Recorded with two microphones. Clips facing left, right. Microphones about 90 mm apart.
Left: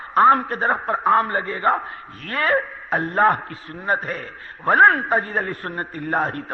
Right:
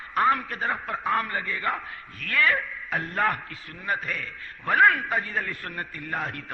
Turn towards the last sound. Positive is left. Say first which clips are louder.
# left 9 dB
turn(degrees=40)  # may be behind; listen again after turning